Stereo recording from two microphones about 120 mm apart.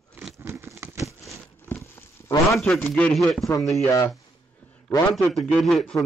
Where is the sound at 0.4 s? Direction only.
20° right (ahead or behind).